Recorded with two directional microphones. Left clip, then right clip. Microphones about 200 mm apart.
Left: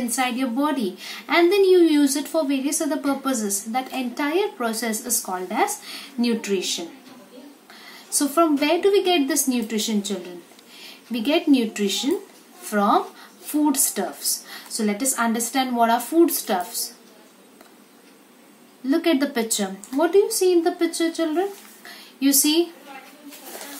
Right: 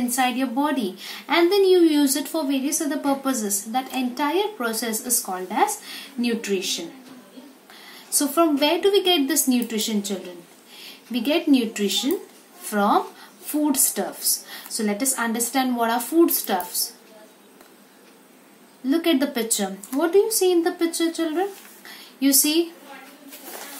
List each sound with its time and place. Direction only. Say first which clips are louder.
0.1 s a woman's voice: right 1 dB; centre (ahead or behind)
7.8 s a woman's voice: even; centre (ahead or behind)
18.9 s a woman's voice: even; centre (ahead or behind)